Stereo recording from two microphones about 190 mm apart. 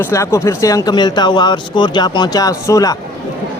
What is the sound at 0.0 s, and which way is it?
Speech, 15° left (ahead or behind).